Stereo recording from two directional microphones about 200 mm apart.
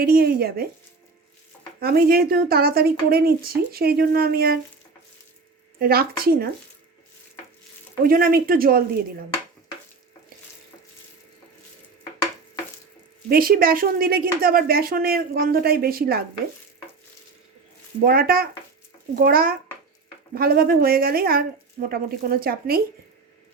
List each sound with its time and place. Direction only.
0.0 s speech: 50° right (ahead or behind)
1.8 s speech: 50° right (ahead or behind)
5.8 s speech: 50° right (ahead or behind)
8.0 s speech: 45° right (ahead or behind)
13.3 s speech: 45° right (ahead or behind)
18.0 s speech: 50° right (ahead or behind)